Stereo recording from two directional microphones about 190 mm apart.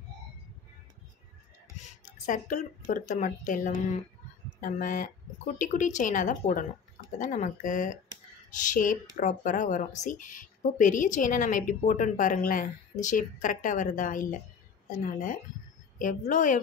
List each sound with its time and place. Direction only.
2.2 s a woman's voice: 45° left (ahead or behind)